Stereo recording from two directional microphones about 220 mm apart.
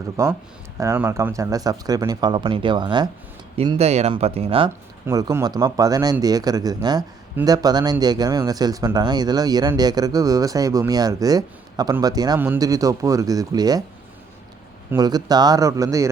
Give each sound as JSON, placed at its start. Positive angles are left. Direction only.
{"t": 0.2, "sound": "speech", "side_deg": -15}
{"t": 5.0, "sound": "speech", "side_deg": -15}
{"t": 14.8, "sound": "speech", "side_deg": -15}